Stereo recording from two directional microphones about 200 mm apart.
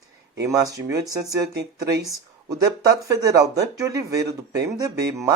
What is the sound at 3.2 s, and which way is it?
Speech, 15° right (ahead or behind).